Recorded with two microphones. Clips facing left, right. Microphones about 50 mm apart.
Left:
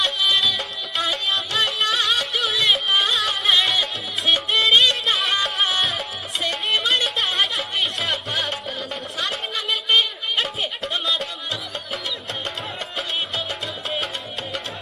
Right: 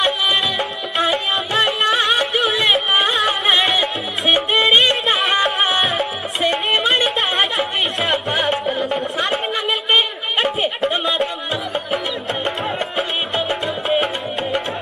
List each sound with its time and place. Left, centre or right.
0.0 s music: right
8.9 s a sound: right
12.4 s music: right